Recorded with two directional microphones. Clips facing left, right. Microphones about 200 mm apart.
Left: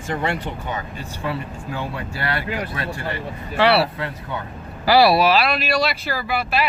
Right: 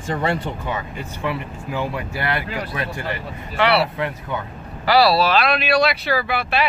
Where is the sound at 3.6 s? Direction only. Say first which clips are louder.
Left 1 dB; 30° left (ahead or behind).